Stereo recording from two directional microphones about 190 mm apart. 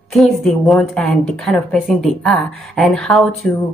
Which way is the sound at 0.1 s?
Centre (ahead or behind).